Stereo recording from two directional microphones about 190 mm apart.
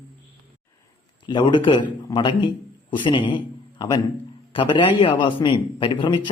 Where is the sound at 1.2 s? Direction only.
25° left (ahead or behind).